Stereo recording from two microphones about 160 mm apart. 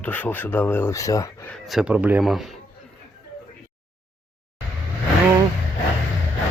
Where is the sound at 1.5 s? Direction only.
Centre (ahead or behind).